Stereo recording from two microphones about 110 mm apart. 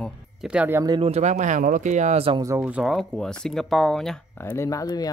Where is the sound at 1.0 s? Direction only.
80° right.